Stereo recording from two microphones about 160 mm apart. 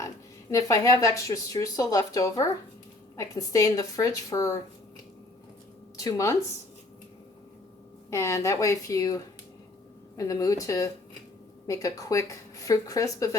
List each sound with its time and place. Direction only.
0.5 s speech: 20° left (ahead or behind)
6.0 s speech: 20° left (ahead or behind)
8.1 s speech: 20° left (ahead or behind)